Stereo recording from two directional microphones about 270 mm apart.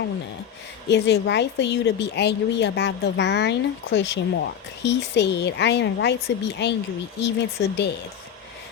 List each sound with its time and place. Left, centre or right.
0.9 s a woman's voice: left